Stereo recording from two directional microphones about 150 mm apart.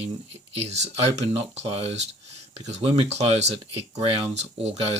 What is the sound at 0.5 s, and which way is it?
Speech, 45° right (ahead or behind).